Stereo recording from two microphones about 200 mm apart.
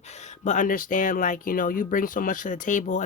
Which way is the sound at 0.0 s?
35° left (ahead or behind).